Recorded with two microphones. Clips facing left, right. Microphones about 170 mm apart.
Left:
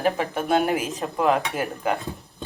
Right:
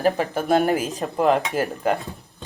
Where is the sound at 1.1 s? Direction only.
40° right (ahead or behind).